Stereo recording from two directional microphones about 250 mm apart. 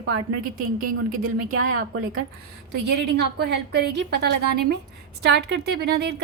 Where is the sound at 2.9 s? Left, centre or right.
Right.